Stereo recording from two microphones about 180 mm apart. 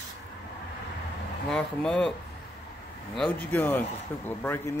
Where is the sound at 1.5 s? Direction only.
5° left (ahead or behind).